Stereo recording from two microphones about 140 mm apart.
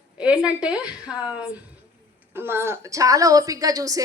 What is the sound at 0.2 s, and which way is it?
A woman's voice, 5° right (ahead or behind).